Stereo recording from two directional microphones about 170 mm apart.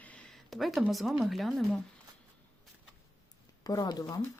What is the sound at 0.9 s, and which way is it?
Speech, centre (ahead or behind).